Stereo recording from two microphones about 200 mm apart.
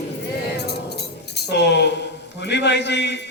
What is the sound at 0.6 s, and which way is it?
Keys jangling, 55° left (ahead or behind).